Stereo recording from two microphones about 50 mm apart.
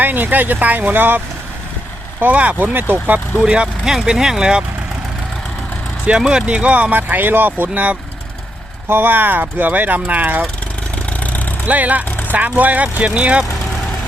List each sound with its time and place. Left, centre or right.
0.0 s speech: right
2.2 s speech: right
2.7 s speech: right
3.4 s speech: centre
6.1 s speech: centre; by 7.9 s right
8.9 s speech: right
10.9 s vehicle: left
11.6 s speech: right